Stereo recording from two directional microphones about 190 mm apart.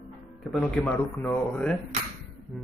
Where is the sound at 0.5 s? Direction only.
5° left (ahead or behind).